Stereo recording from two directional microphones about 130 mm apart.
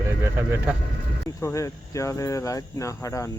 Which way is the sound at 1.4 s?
25° left (ahead or behind).